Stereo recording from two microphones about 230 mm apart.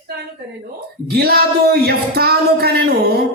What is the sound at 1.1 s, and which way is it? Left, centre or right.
Speech, right.